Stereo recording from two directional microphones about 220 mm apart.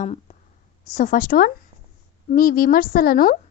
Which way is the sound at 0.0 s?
35° left (ahead or behind).